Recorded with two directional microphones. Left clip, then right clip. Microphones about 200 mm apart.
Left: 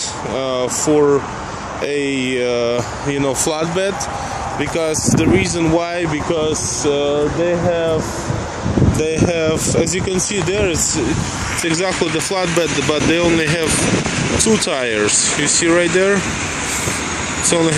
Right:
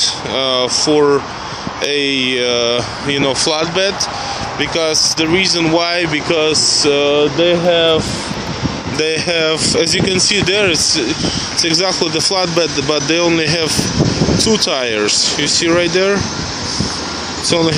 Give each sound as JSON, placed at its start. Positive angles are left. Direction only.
{"t": 0.0, "sound": "speech", "side_deg": 5}
{"t": 6.3, "sound": "speech", "side_deg": -10}
{"t": 9.3, "sound": "speech", "side_deg": 5}
{"t": 17.5, "sound": "speech", "side_deg": -5}